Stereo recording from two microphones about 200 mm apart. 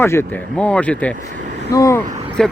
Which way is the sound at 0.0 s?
10° left (ahead or behind).